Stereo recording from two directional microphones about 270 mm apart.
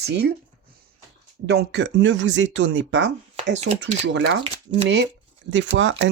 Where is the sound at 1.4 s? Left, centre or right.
Right.